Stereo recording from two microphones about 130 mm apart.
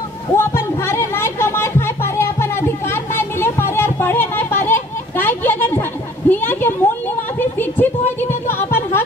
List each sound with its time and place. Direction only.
0.4 s music: 20° left (ahead or behind)